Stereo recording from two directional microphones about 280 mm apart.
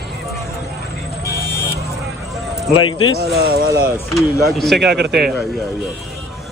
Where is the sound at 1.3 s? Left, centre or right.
Right.